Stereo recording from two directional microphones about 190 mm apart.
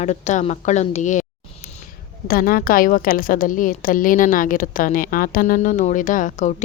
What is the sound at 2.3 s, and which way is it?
A woman's voice, 50° left (ahead or behind).